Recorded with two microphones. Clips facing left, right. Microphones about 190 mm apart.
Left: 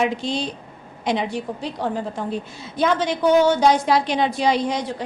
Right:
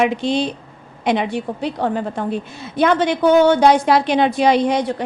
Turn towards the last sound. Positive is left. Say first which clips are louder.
# right 6 dB
turn(degrees=-60)  # may be behind; listen again after turning